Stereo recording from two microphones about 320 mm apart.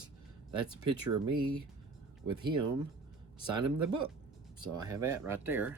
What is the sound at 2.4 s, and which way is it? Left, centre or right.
Speech, centre.